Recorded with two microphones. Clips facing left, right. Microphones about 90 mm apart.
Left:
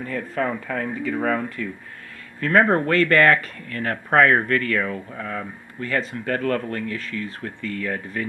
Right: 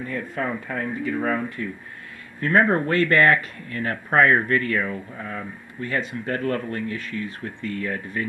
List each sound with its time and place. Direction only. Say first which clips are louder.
0.0 s speech: left 2 dB; 50° left (ahead or behind)
2.4 s speech: left 1 dB; 55° left (ahead or behind)